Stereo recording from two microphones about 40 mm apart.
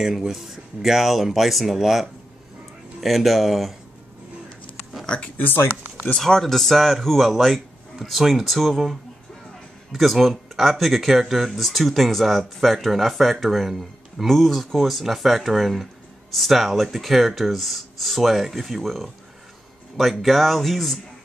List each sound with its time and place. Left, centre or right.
0.0 s speech: centre
5.0 s speech: left
5.4 s speech: left
6.1 s speech: centre
10.2 s speech: centre